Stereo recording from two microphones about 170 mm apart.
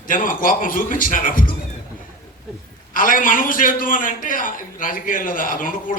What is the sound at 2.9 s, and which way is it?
A man's voice, 50° left (ahead or behind).